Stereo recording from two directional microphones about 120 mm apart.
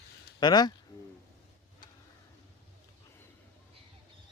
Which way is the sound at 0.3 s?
35° left (ahead or behind).